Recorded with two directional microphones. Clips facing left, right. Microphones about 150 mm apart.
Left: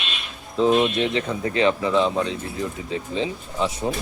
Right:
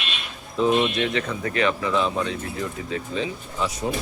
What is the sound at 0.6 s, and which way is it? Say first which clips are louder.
Speech: left 2 dB; 20° left (ahead or behind).